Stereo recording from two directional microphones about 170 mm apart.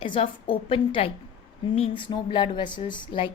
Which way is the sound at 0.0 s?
30° left (ahead or behind).